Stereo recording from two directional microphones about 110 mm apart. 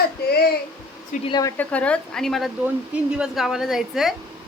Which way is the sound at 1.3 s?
35° left (ahead or behind).